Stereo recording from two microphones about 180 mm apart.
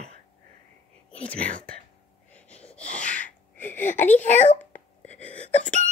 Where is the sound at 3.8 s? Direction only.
40° left (ahead or behind).